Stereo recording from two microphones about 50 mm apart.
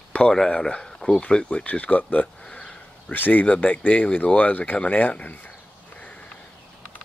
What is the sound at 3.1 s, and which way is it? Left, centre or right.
Speech, left.